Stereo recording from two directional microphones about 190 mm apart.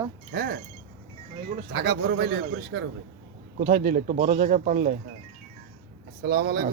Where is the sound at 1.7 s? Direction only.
60° right (ahead or behind).